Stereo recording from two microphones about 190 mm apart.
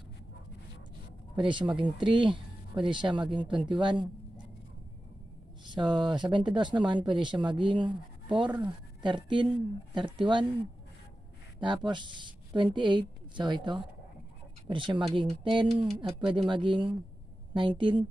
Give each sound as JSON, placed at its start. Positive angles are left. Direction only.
{"t": 1.3, "sound": "speech", "side_deg": -25}
{"t": 5.7, "sound": "a woman's voice", "side_deg": -25}
{"t": 11.6, "sound": "speech", "side_deg": -25}